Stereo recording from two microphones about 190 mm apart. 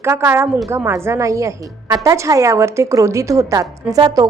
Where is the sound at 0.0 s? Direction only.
15° right (ahead or behind).